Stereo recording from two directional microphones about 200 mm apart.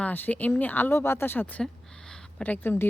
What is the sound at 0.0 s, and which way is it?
Speech, 10° left (ahead or behind).